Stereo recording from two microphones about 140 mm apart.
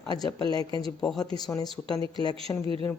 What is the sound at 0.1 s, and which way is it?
Speech, 30° left (ahead or behind).